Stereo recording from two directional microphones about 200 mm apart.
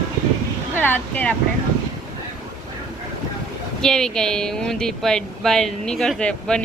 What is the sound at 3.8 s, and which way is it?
A woman's voice, 5° left (ahead or behind).